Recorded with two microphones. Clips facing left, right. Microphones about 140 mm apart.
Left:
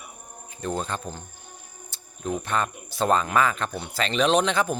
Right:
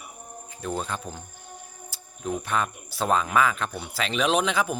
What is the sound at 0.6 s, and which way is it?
Speech, 5° right (ahead or behind).